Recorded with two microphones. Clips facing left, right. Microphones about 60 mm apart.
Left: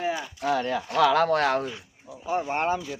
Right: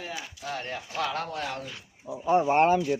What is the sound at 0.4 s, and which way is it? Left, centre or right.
Speech, left.